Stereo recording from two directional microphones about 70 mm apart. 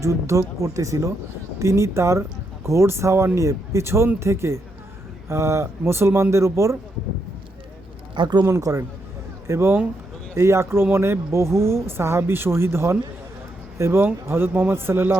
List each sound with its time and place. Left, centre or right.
0.0 s speech: right
8.1 s speech: right
8.4 s speech: right
9.5 s speech: right